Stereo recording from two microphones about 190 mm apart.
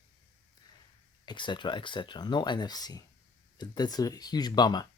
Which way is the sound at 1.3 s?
25° left (ahead or behind).